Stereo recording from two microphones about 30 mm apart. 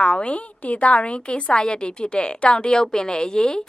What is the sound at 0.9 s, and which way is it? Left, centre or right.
A woman's voice, left.